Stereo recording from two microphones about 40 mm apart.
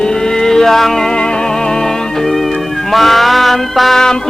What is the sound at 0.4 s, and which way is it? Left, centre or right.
Music, centre.